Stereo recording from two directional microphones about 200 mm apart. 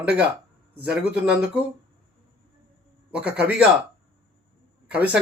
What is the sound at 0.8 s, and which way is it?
Speech, 5° right (ahead or behind).